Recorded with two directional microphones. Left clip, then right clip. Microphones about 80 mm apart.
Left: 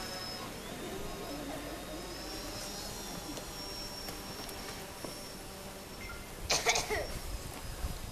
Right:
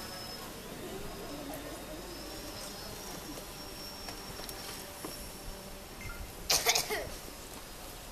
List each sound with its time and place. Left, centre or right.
6.4 s cough: right